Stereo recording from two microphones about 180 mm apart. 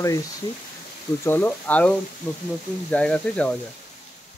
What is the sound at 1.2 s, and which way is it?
Speech, 10° left (ahead or behind).